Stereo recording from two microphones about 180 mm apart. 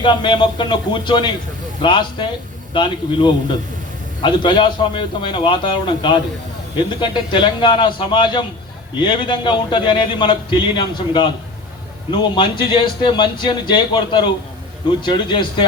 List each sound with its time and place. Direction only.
0.0 s a man's voice: 25° left (ahead or behind)